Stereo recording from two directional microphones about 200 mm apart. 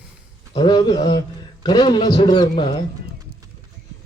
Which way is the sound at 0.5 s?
25° left (ahead or behind).